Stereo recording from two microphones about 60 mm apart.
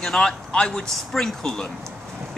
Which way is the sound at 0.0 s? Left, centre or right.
Centre.